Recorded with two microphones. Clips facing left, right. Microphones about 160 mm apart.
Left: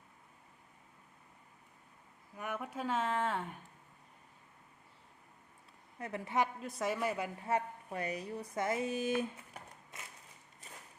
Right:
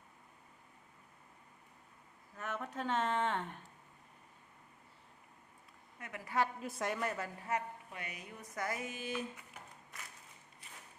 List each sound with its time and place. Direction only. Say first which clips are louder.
2.3 s speech: left 1 dB; 10° left (ahead or behind)
6.0 s speech: left 7 dB; 30° left (ahead or behind)
6.6 s speech: left 2 dB; centre (ahead or behind)
7.5 s a woman's voice: left 4 dB; 30° left (ahead or behind)